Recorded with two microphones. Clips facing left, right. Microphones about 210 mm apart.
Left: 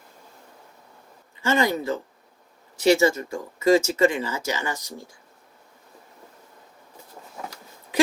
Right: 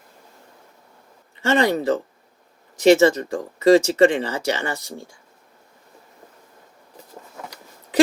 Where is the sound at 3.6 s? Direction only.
35° right (ahead or behind).